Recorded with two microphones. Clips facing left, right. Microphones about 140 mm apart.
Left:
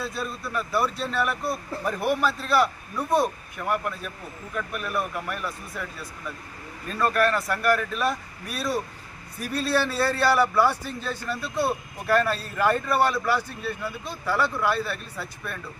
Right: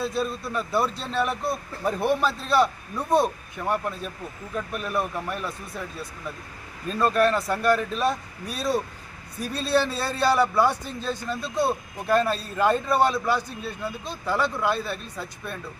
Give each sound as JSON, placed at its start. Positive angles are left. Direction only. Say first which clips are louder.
{"t": 0.0, "sound": "a man's voice", "louder": "right 4 dB", "side_deg": -25}